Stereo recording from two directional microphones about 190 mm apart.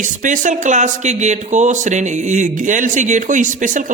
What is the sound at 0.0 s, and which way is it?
Speech, 40° right (ahead or behind).